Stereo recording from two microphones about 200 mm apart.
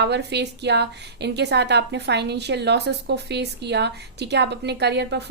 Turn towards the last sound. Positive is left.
turn(degrees=-60)  # may be behind; listen again after turning